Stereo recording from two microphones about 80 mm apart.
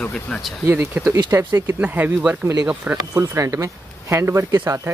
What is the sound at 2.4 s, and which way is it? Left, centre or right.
Speech, right.